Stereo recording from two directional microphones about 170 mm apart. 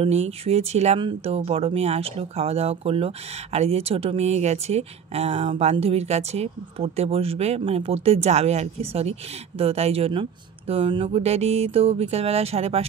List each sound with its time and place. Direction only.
0.0 s speech: 40° right (ahead or behind)